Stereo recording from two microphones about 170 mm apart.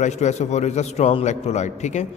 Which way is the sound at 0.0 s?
40° left (ahead or behind).